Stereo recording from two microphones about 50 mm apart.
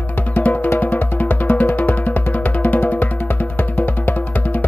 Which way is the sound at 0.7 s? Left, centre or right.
Left.